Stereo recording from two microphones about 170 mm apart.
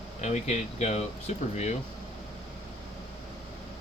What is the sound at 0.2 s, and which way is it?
Speech, 40° left (ahead or behind).